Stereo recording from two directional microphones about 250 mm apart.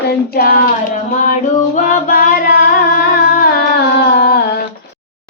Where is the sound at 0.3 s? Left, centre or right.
Left.